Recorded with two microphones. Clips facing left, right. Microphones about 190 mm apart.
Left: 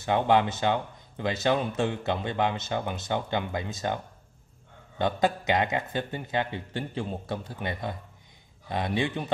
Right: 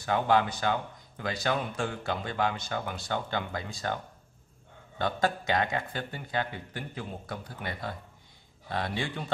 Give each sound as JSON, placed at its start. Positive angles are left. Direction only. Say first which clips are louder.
{"t": 0.0, "sound": "speech", "louder": "left 3 dB", "side_deg": 20}